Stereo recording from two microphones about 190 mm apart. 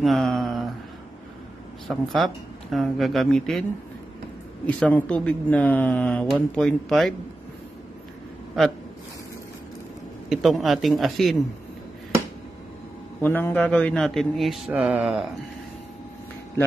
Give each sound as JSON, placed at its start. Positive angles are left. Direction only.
{"t": 0.0, "sound": "a sound", "side_deg": 0}
{"t": 1.9, "sound": "a man's voice", "side_deg": 0}
{"t": 4.6, "sound": "speech", "side_deg": 5}
{"t": 8.6, "sound": "a man's voice", "side_deg": 0}
{"t": 10.3, "sound": "a man's voice", "side_deg": 0}
{"t": 13.2, "sound": "a man's voice", "side_deg": 10}